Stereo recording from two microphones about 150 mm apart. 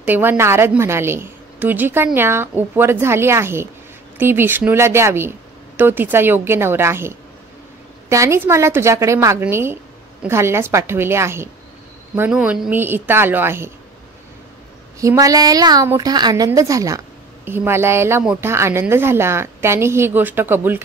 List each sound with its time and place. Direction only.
0.0 s a woman's voice: 15° right (ahead or behind)
15.0 s a woman's voice: 20° right (ahead or behind)